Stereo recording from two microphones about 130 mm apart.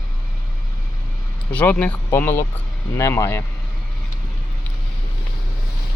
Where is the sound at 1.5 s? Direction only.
15° left (ahead or behind).